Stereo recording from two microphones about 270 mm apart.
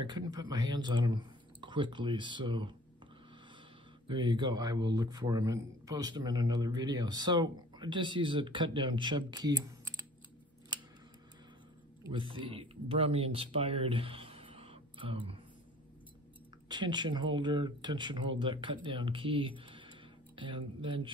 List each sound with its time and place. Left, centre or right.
0.0 s a man's voice: centre
4.1 s a man's voice: centre
12.0 s speech: centre
16.6 s a man's voice: centre